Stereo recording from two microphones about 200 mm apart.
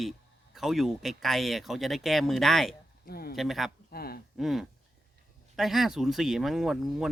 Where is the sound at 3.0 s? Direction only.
50° left (ahead or behind).